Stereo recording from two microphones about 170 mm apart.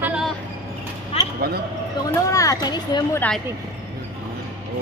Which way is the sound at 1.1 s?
35° left (ahead or behind).